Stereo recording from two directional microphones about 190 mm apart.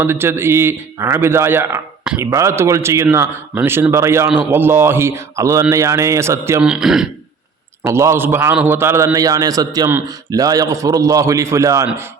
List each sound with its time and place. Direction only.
0.0 s a man's voice: 10° right (ahead or behind)
7.9 s a man's voice: 15° right (ahead or behind)